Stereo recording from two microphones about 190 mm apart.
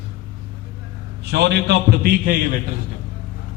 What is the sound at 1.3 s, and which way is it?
A man's voice, 60° right (ahead or behind).